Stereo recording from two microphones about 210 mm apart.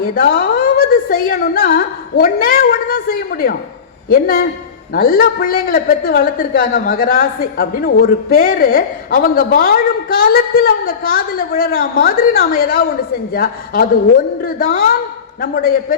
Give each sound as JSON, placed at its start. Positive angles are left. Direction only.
{"t": 0.0, "sound": "a woman's voice", "side_deg": 45}